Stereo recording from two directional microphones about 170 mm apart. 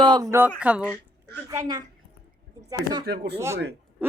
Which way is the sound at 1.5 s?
25° right (ahead or behind).